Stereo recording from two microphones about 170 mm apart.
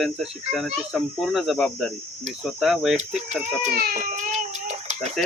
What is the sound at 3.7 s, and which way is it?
Baby cry, 60° right (ahead or behind).